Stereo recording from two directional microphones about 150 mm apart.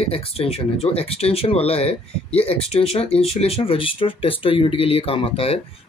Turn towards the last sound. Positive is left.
turn(degrees=40)  # may be behind; listen again after turning